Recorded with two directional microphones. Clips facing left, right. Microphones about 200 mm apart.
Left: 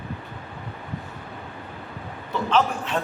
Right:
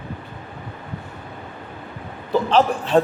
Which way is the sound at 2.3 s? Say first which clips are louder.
Right 5 dB; 35° right (ahead or behind).